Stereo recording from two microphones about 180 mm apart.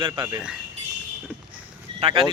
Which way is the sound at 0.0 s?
20° right (ahead or behind).